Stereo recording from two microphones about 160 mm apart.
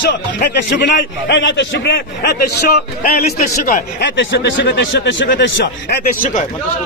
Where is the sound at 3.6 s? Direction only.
60° left (ahead or behind).